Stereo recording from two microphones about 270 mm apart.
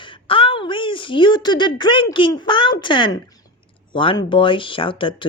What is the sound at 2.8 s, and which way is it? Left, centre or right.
A woman's voice, centre.